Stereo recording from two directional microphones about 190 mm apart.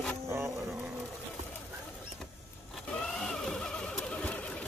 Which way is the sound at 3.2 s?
5° left (ahead or behind).